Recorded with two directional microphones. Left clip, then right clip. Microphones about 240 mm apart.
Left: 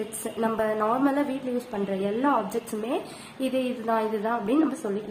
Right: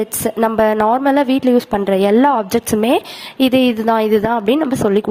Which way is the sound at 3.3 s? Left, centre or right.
Right.